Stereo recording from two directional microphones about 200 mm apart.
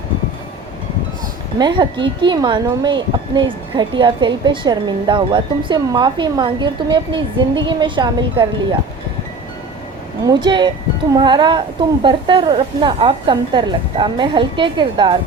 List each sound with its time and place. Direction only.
1.5 s speech: 20° right (ahead or behind)
10.2 s speech: 20° right (ahead or behind)